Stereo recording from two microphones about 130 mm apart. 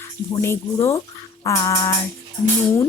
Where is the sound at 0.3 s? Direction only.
20° left (ahead or behind).